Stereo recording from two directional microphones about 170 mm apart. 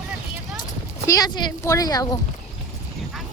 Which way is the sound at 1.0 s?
20° left (ahead or behind).